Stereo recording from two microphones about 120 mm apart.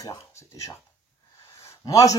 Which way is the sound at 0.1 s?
25° left (ahead or behind).